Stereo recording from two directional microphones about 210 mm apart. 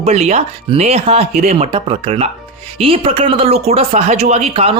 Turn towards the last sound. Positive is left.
turn(degrees=-30)  # may be behind; listen again after turning